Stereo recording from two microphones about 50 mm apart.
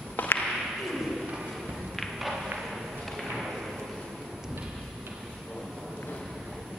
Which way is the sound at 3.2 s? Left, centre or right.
Centre.